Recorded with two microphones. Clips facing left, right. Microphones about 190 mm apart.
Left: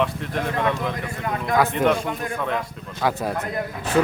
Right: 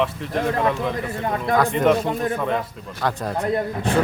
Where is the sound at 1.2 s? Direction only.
30° right (ahead or behind).